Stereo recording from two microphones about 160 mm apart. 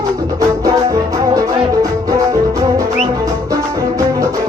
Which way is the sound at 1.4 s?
20° right (ahead or behind).